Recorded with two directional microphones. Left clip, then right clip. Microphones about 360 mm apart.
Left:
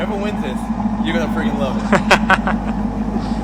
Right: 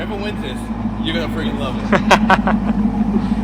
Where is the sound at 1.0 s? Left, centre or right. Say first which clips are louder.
Left 1 dB; centre.